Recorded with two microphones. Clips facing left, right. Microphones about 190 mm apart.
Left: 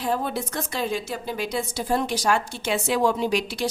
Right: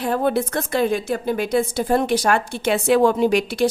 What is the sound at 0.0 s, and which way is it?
A woman's voice, 60° right (ahead or behind).